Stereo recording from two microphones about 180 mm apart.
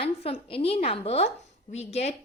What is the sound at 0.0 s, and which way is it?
A woman's voice, 30° left (ahead or behind).